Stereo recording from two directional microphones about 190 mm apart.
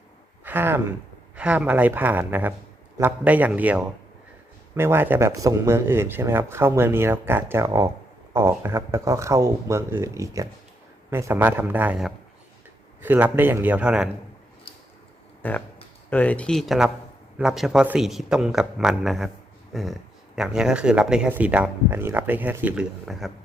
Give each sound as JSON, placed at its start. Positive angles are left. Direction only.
{"t": 0.4, "sound": "speech", "side_deg": -10}
{"t": 15.4, "sound": "speech", "side_deg": 10}